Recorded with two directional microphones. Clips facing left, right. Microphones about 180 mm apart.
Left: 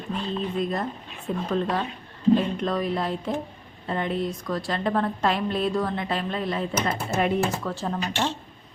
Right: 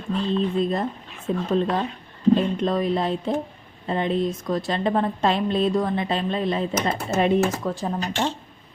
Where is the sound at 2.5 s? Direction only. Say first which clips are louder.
Right 3 dB; 25° right (ahead or behind).